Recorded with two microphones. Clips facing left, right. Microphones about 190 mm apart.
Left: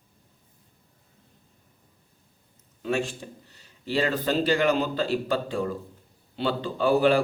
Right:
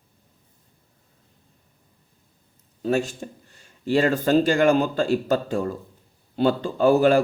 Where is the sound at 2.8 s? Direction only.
40° right (ahead or behind).